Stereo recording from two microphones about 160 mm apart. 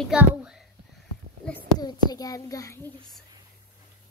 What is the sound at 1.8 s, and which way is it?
A child's voice, 25° left (ahead or behind).